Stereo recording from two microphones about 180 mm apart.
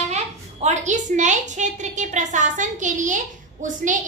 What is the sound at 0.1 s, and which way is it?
A woman's voice, 40° right (ahead or behind).